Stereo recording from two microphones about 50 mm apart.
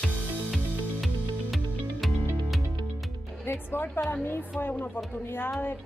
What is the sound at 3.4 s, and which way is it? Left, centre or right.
A woman's voice, left.